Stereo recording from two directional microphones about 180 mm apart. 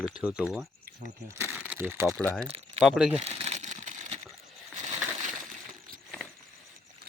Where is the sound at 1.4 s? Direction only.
10° right (ahead or behind).